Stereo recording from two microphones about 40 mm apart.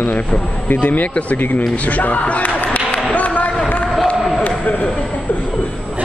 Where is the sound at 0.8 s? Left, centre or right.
Left.